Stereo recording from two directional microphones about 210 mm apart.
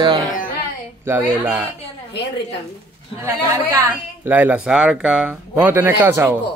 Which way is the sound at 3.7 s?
10° right (ahead or behind).